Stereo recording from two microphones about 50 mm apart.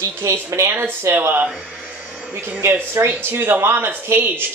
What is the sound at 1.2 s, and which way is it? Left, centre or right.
Speech, right.